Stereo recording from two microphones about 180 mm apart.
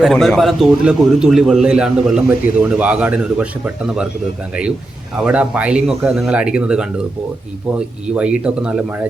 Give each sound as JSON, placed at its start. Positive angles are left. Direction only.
{"t": 0.0, "sound": "a man's voice", "side_deg": 0}
{"t": 5.2, "sound": "a man's voice", "side_deg": -5}
{"t": 8.0, "sound": "a man's voice", "side_deg": -5}